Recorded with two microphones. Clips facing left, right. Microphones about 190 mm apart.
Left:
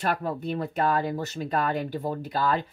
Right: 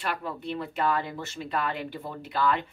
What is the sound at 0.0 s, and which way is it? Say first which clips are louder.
Speech: left 5 dB; 40° left (ahead or behind).